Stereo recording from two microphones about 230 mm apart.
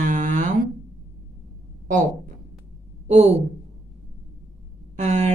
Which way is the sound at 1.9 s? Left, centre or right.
Right.